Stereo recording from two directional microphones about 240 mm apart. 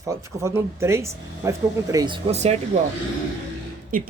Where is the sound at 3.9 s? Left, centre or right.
Right.